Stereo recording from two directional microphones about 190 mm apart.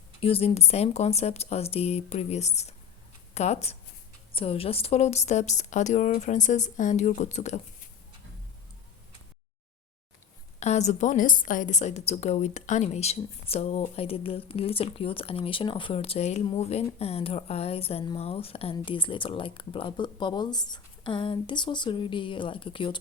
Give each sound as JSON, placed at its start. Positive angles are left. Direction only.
{"t": 0.2, "sound": "a woman's voice", "side_deg": 30}
{"t": 10.6, "sound": "a woman's voice", "side_deg": 35}